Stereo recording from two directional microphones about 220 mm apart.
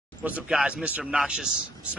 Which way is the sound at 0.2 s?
5° right (ahead or behind).